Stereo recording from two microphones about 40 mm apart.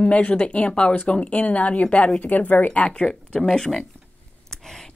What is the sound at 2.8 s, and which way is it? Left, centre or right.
Speech, left.